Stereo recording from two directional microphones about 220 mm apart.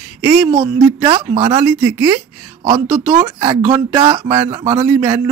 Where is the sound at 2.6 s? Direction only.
20° right (ahead or behind).